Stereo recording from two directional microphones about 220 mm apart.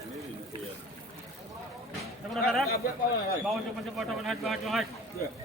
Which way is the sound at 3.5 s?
Centre (ahead or behind).